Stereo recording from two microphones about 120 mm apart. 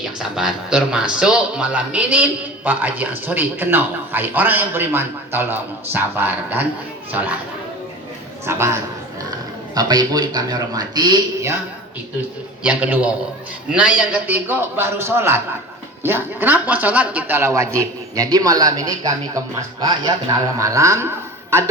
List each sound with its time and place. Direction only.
0.0 s speech: 5° right (ahead or behind)
8.4 s speech: 20° right (ahead or behind)
9.7 s a man's voice: 35° right (ahead or behind)
12.6 s a man's voice: 10° right (ahead or behind)